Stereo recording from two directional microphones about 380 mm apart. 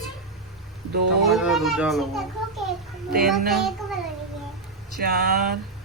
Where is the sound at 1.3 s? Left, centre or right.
Centre.